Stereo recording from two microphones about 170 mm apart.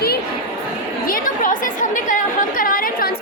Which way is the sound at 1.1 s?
50° left (ahead or behind).